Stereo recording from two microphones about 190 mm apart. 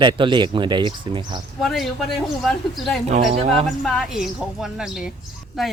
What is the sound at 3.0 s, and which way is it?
Speech, 35° right (ahead or behind).